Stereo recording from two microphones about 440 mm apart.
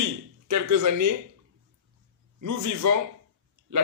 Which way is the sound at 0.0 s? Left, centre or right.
Right.